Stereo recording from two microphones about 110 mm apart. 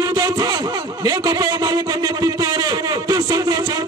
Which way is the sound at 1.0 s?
35° right (ahead or behind).